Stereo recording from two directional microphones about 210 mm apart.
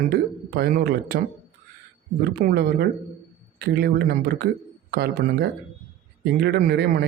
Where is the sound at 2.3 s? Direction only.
45° right (ahead or behind).